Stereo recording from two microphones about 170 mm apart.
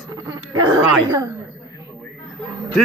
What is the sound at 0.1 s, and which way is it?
Dog, 25° right (ahead or behind).